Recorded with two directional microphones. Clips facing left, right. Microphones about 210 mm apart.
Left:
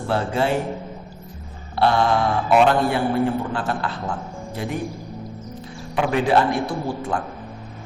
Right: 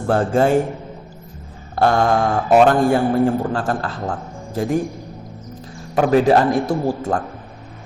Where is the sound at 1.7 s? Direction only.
45° right (ahead or behind).